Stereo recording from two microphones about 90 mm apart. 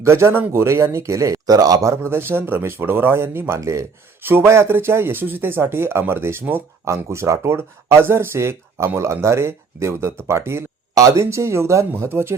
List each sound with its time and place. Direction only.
0.0 s speech: 30° right (ahead or behind)